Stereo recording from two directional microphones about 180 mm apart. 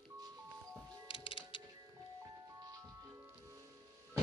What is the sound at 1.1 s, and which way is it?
Music, 30° left (ahead or behind).